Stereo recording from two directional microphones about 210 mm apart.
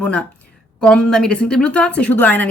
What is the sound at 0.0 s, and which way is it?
A woman's voice, 5° left (ahead or behind).